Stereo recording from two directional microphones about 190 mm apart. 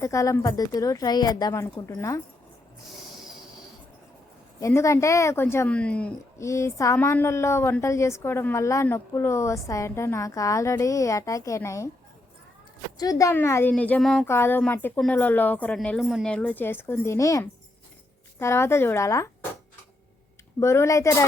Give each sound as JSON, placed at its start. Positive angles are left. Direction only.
{"t": 0.0, "sound": "speech", "side_deg": 15}
{"t": 4.6, "sound": "a woman's voice", "side_deg": 15}
{"t": 13.0, "sound": "a woman's voice", "side_deg": 20}
{"t": 20.6, "sound": "a woman's voice", "side_deg": 15}